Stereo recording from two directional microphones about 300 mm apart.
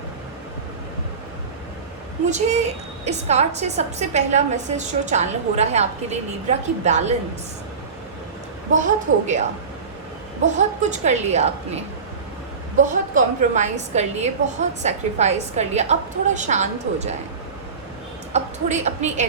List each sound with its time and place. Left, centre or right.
2.3 s a woman's voice: right
8.7 s a woman's voice: right
18.3 s a woman's voice: right